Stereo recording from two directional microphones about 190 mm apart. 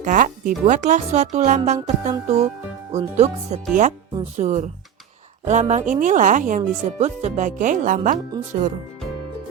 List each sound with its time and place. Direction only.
0.0 s speech: 45° right (ahead or behind)